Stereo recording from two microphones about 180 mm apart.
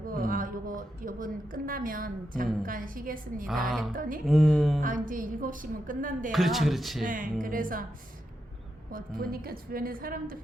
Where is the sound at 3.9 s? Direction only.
50° right (ahead or behind).